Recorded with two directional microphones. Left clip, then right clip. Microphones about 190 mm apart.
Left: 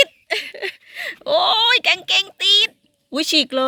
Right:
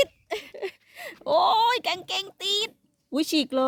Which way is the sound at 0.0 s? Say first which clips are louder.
Left 8 dB; centre (ahead or behind).